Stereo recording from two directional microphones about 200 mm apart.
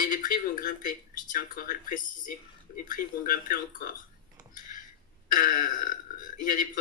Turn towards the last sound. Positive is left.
turn(degrees=45)  # may be behind; listen again after turning